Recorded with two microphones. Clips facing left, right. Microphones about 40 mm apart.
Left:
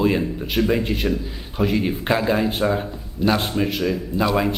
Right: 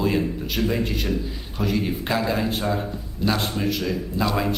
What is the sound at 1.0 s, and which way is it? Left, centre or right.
Speech, centre.